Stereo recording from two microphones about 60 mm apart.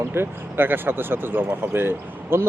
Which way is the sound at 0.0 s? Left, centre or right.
Right.